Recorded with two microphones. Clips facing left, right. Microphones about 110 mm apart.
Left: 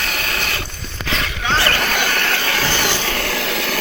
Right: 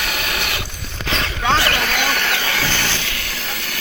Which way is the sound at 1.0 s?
25° right (ahead or behind).